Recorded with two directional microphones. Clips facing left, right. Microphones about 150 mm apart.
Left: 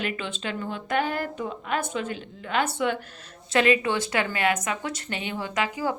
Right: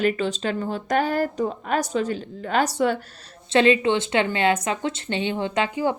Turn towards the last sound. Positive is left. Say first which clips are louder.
# right 4 dB
turn(degrees=-25)  # may be behind; listen again after turning